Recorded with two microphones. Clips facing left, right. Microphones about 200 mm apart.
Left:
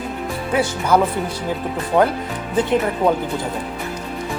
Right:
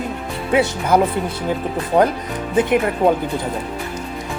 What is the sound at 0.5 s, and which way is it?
Speech, 20° right (ahead or behind).